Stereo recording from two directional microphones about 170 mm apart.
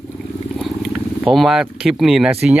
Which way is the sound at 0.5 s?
5° right (ahead or behind).